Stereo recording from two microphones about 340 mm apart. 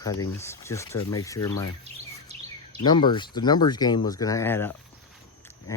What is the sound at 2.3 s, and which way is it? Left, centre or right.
Bird vocalization, centre.